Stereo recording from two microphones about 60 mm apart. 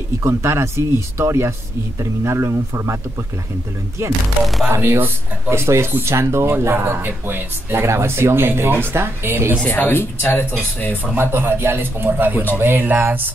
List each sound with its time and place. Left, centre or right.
0.2 s a man's voice: right
4.6 s a man's voice: right
9.7 s speech: left
11.1 s a man's voice: right